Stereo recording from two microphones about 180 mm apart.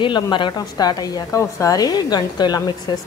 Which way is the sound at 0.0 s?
25° left (ahead or behind).